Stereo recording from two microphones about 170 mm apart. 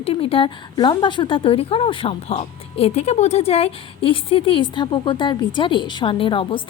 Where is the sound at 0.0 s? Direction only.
35° left (ahead or behind).